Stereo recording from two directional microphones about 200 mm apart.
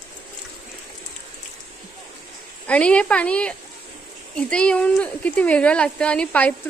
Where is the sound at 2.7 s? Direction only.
5° left (ahead or behind).